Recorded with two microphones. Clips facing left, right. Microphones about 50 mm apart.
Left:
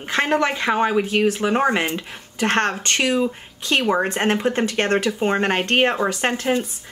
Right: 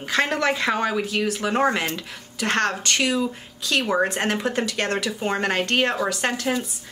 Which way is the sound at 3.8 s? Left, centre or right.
Left.